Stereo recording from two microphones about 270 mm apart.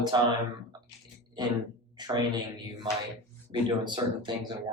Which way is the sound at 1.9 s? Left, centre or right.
Centre.